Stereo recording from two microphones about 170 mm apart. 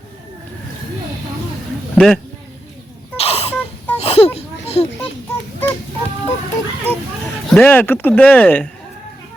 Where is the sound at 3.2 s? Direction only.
35° left (ahead or behind).